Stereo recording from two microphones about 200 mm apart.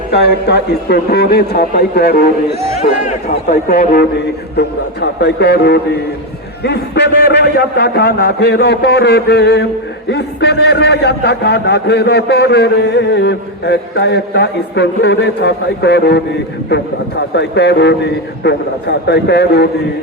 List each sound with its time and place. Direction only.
0.1 s a man's voice: 55° left (ahead or behind)
4.5 s a man's voice: 55° left (ahead or behind)
17.3 s a man's voice: 60° left (ahead or behind)